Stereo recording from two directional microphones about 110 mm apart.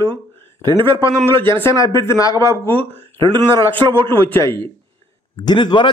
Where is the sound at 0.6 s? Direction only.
45° right (ahead or behind).